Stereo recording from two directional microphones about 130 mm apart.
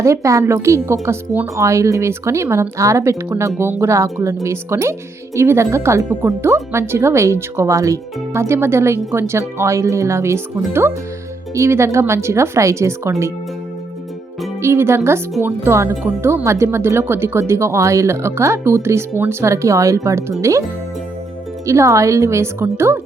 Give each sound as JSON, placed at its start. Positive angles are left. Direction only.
{"t": 0.0, "sound": "speech", "side_deg": -25}
{"t": 14.6, "sound": "speech", "side_deg": -20}
{"t": 21.7, "sound": "speech", "side_deg": -25}